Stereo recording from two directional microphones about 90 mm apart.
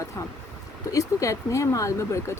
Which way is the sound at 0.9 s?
35° left (ahead or behind).